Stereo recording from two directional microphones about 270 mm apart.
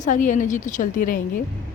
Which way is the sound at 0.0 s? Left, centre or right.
Left.